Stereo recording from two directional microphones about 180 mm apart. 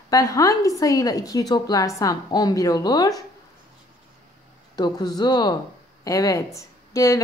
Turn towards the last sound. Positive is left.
turn(degrees=20)  # may be behind; listen again after turning